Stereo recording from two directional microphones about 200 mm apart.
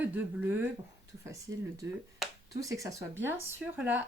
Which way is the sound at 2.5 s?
15° right (ahead or behind).